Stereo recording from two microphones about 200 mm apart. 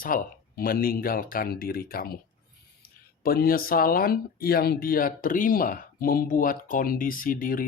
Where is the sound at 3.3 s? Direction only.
45° left (ahead or behind).